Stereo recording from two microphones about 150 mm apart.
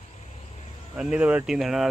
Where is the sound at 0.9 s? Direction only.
5° right (ahead or behind).